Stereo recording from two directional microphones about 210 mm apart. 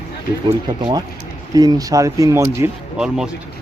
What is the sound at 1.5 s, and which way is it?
Speech, 20° right (ahead or behind).